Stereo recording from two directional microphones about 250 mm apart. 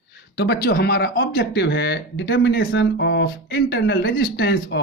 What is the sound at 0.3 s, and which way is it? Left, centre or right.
Speech, left.